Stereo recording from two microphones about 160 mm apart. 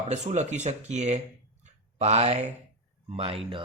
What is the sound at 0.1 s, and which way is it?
Speech, 45° right (ahead or behind).